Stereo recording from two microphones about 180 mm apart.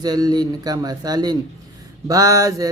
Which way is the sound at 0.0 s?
20° right (ahead or behind).